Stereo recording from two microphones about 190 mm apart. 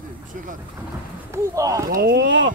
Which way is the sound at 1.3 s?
15° right (ahead or behind).